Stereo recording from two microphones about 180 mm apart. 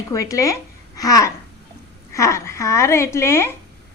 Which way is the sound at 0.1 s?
20° left (ahead or behind).